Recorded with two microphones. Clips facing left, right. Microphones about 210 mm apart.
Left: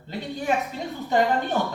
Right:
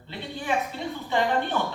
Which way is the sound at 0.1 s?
45° left (ahead or behind).